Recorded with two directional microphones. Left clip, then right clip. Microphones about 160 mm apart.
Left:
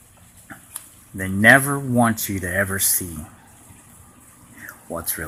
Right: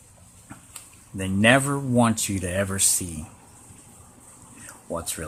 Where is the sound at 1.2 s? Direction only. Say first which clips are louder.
Left 5 dB; 25° right (ahead or behind).